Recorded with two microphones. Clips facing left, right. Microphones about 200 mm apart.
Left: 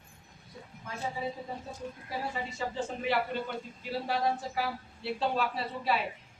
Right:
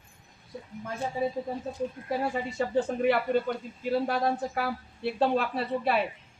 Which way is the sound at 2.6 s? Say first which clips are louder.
Right 11 dB; 55° right (ahead or behind).